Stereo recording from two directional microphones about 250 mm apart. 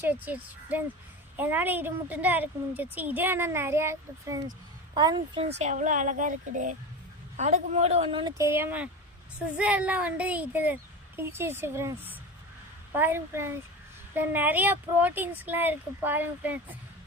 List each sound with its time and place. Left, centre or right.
0.0 s a woman's voice: centre